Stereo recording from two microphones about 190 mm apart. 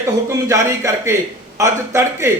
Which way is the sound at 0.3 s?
15° right (ahead or behind).